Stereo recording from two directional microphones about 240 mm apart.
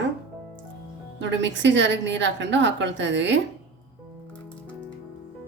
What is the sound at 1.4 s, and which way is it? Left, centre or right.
A woman's voice, right.